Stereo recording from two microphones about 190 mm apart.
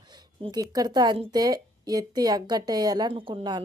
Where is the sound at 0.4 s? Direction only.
20° right (ahead or behind).